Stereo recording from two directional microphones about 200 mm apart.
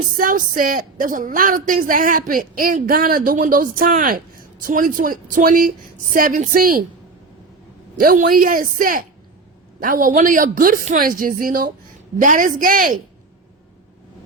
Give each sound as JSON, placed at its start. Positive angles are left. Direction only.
{"t": 0.2, "sound": "a woman's voice", "side_deg": -40}
{"t": 7.9, "sound": "a woman's voice", "side_deg": -45}